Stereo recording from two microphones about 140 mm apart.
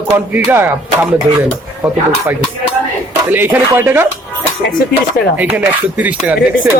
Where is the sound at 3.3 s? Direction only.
15° right (ahead or behind).